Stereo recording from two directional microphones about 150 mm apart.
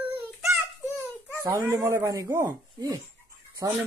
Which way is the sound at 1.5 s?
20° right (ahead or behind).